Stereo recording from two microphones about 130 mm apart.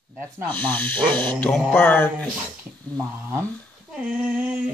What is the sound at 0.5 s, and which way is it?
Speech, 10° left (ahead or behind).